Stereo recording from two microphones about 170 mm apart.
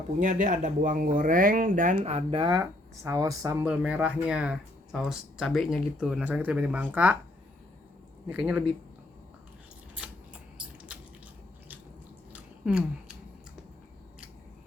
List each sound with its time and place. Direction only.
0.2 s speech: 50° right (ahead or behind); by 2.5 s 35° right (ahead or behind)
2.5 s speech: 20° right (ahead or behind)
8.3 s speech: 5° right (ahead or behind)
10.0 s scissors: 5° right (ahead or behind)
12.3 s a sound: 5° right (ahead or behind)